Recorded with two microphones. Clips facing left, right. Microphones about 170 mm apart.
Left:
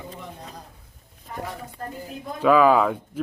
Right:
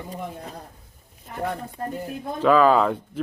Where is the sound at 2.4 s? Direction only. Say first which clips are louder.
Even; 10° left (ahead or behind).